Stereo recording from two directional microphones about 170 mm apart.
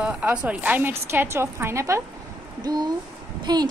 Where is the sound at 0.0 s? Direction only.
5° right (ahead or behind).